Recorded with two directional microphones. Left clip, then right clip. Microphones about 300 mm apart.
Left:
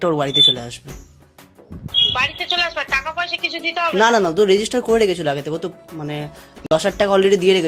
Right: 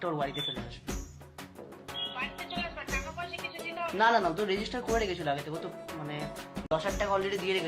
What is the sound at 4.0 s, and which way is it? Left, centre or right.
Speech, left.